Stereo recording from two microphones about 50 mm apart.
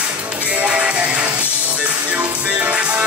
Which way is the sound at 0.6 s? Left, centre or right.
Right.